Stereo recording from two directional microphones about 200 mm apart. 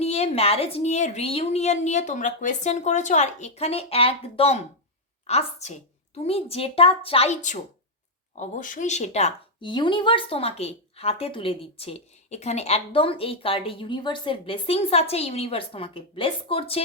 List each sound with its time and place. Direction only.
0.0 s a woman's voice: 35° left (ahead or behind)